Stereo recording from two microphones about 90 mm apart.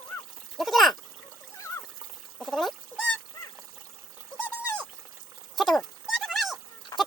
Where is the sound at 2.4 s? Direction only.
Centre (ahead or behind).